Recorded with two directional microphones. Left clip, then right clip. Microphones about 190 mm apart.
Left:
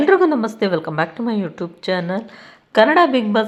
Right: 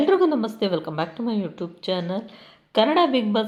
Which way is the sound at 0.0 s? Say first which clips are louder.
Left 5 dB; 15° left (ahead or behind).